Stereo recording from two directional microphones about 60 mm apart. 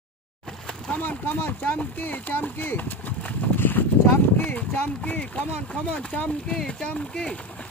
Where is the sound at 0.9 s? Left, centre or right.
Left; by 6.8 s centre.